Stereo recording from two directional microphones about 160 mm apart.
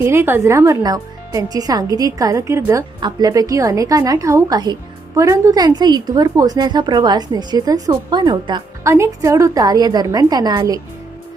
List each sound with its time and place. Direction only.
0.0 s a woman's voice: 15° right (ahead or behind)
8.8 s a woman's voice: 20° right (ahead or behind)